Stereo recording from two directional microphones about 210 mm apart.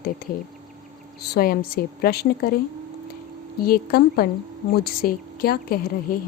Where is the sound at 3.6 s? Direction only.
45° left (ahead or behind).